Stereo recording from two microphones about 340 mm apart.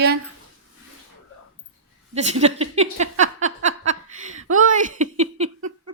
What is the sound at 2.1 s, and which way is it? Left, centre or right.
Speech, centre.